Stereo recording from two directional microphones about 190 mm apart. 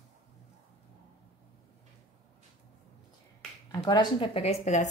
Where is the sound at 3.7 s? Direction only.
20° left (ahead or behind); by 4.9 s 40° left (ahead or behind).